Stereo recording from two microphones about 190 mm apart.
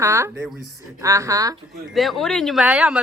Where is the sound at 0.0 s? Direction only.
15° right (ahead or behind).